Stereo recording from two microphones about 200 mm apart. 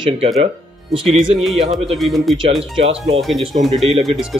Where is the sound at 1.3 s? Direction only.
Centre (ahead or behind).